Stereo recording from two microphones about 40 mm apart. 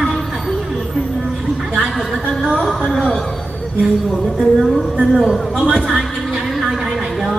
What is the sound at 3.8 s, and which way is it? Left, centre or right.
Speech, centre.